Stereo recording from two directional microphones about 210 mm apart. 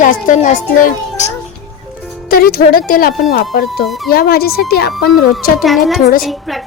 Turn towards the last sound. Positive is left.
turn(degrees=0)  # may be behind; listen again after turning